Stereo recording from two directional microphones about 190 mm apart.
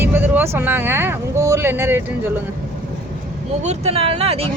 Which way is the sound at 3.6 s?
35° right (ahead or behind).